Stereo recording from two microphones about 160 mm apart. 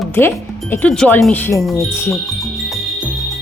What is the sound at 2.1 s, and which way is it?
Insect, centre (ahead or behind).